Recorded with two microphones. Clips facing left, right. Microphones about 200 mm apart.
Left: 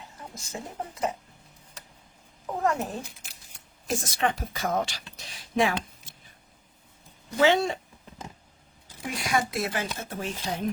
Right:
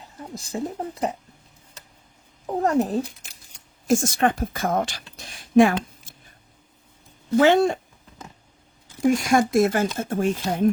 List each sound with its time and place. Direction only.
0.3 s speech: 35° right (ahead or behind)
2.5 s speech: 35° right (ahead or behind)
3.8 s speech: 50° right (ahead or behind)
7.3 s speech: 50° right (ahead or behind)
9.0 s speech: 45° right (ahead or behind)